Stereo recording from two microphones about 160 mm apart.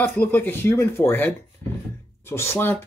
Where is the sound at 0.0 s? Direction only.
15° left (ahead or behind).